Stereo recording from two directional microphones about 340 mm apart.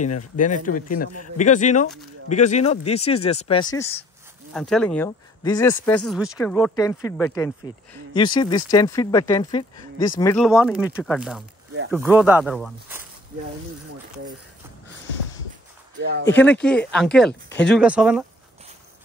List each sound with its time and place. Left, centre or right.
0.4 s a man's voice: left; by 13.0 s centre
16.0 s speech: right
16.3 s speech: centre